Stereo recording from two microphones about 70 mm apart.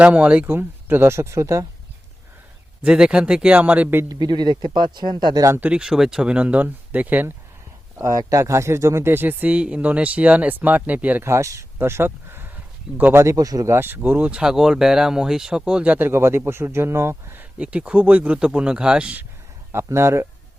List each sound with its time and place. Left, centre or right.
0.0 s speech: centre
0.5 s speech: right
2.8 s speech: centre
4.1 s speech: right
5.5 s speech: right
5.8 s speech: centre; by 7.3 s right
7.9 s speech: right
11.2 s speech: right
11.8 s a sound: right
13.3 s speech: right
13.7 s speech: right
17.6 s speech: centre
19.7 s speech: right